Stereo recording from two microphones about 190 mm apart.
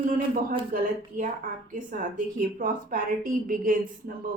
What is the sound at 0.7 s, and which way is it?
A woman's voice, 45° right (ahead or behind).